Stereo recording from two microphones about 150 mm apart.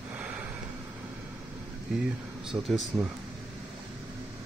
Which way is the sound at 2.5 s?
5° right (ahead or behind).